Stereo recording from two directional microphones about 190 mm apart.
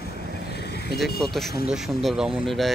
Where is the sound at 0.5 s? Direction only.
60° left (ahead or behind).